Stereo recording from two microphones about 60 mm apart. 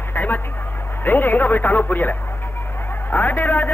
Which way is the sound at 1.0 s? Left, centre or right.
Left.